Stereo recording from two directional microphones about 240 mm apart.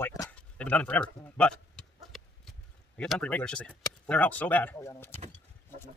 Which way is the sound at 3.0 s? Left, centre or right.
Centre.